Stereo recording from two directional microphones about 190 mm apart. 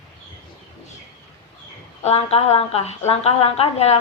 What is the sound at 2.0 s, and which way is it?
A woman's voice, 30° left (ahead or behind).